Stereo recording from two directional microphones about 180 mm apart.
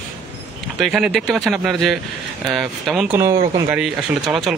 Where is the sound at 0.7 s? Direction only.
Centre (ahead or behind).